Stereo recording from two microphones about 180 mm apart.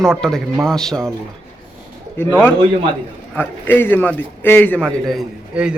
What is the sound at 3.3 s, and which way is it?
A man's voice, 10° left (ahead or behind).